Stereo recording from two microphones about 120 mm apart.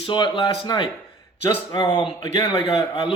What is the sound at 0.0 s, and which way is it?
A man's voice, 45° left (ahead or behind).